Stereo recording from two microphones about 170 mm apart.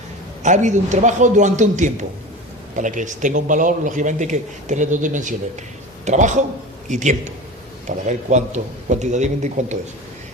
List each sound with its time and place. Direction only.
0.4 s speech: 45° right (ahead or behind)